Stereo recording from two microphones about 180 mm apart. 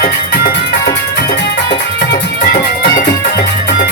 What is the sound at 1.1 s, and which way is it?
Music, 65° left (ahead or behind).